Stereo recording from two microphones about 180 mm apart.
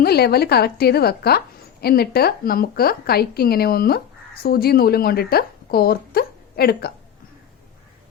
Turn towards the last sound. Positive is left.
turn(degrees=60)  # may be behind; listen again after turning